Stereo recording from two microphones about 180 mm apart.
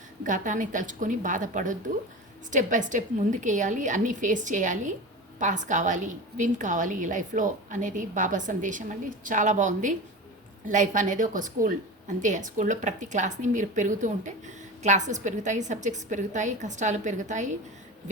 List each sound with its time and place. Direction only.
0.3 s a woman's voice: 45° right (ahead or behind)